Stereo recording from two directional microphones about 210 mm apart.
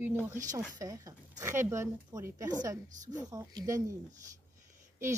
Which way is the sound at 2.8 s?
35° right (ahead or behind).